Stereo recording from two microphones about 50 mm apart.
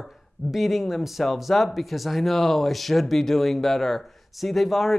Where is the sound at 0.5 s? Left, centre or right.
Centre.